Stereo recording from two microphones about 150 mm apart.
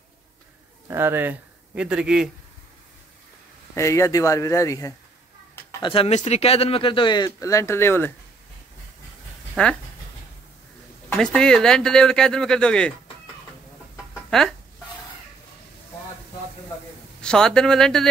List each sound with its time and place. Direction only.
0.8 s speech: 15° right (ahead or behind)
3.7 s speech: 20° left (ahead or behind)
5.8 s speech: 30° left (ahead or behind)
6.0 s speech: 45° left (ahead or behind); by 8.1 s 15° left (ahead or behind)
9.6 s speech: 10° left (ahead or behind)
11.1 s speech: 5° left (ahead or behind)
17.2 s speech: 5° left (ahead or behind)